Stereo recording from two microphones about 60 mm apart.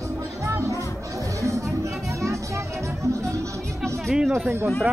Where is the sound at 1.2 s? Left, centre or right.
Right.